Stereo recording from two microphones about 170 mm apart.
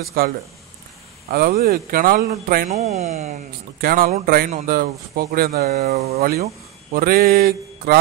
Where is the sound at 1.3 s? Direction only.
60° right (ahead or behind).